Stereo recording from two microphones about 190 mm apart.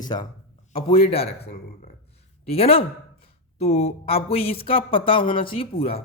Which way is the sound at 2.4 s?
30° left (ahead or behind).